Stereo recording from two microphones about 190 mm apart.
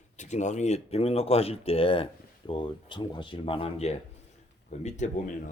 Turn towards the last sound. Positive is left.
turn(degrees=40)  # may be behind; listen again after turning